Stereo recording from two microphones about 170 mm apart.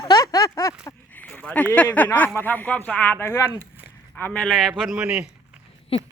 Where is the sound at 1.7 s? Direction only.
10° left (ahead or behind); by 5.3 s 5° right (ahead or behind).